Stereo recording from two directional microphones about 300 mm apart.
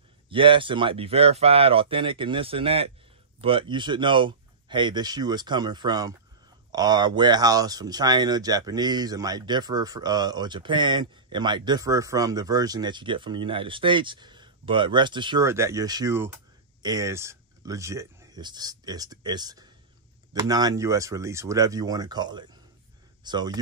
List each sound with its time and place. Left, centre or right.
0.3 s speech: centre